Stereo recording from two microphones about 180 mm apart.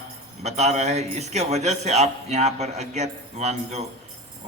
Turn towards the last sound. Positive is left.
turn(degrees=-40)  # may be behind; listen again after turning